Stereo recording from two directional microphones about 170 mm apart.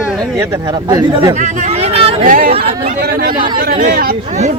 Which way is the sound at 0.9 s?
25° right (ahead or behind).